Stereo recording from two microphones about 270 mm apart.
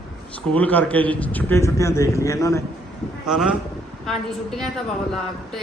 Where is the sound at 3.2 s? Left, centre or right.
Centre.